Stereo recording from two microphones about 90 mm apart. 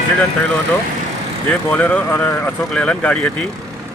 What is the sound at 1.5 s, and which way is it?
Speech, 15° left (ahead or behind).